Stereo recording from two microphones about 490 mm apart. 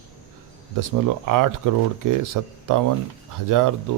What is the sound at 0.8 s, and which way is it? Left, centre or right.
Speech, right.